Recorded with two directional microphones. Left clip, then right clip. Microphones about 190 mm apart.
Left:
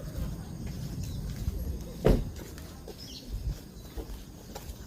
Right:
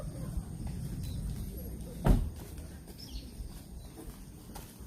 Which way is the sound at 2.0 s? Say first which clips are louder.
Left 7 dB; 55° right (ahead or behind).